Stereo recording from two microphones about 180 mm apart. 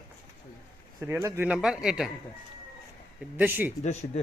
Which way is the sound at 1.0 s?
15° right (ahead or behind).